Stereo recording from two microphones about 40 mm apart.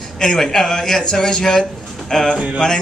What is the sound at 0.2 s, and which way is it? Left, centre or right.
A man's voice, centre.